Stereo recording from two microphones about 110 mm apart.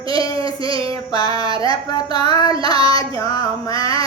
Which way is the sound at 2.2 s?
35° left (ahead or behind).